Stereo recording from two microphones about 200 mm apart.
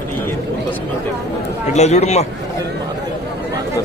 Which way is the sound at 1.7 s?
35° left (ahead or behind).